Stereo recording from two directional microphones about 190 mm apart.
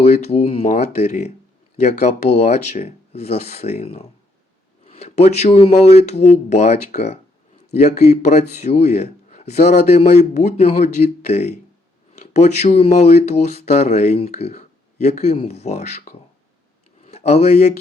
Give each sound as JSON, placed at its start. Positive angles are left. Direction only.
{"t": 0.0, "sound": "speech", "side_deg": 35}